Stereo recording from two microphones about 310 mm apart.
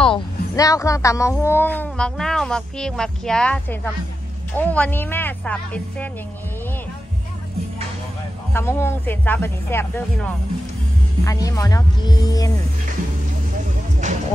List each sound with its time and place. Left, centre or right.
0.0 s speech: centre
8.5 s speech: centre
14.0 s music: right